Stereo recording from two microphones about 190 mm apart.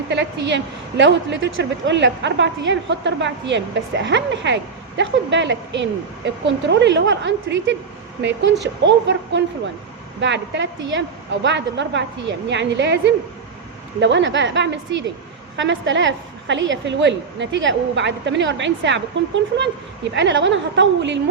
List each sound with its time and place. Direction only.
0.1 s a woman's voice: 70° right (ahead or behind)
20.1 s a woman's voice: 75° right (ahead or behind)